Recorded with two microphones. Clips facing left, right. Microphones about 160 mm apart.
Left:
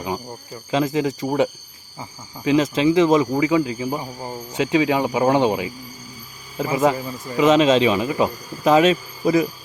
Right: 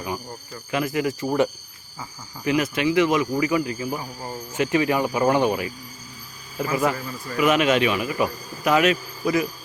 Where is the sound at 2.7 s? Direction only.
25° left (ahead or behind).